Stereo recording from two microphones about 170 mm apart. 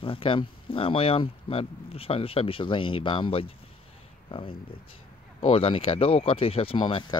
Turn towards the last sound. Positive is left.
turn(degrees=30)  # may be behind; listen again after turning